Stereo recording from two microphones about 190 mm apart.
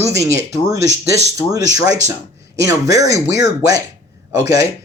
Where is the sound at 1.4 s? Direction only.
25° left (ahead or behind).